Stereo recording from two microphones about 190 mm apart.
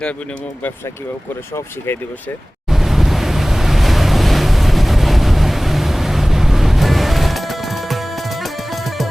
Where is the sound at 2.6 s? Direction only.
Centre (ahead or behind).